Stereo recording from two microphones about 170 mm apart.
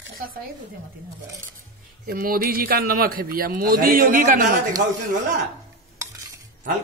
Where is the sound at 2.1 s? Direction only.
60° right (ahead or behind).